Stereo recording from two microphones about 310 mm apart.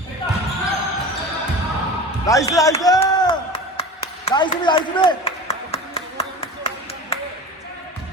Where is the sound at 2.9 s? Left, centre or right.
Centre.